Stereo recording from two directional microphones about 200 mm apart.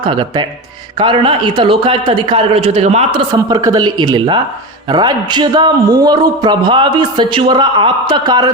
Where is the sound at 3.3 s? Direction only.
20° right (ahead or behind).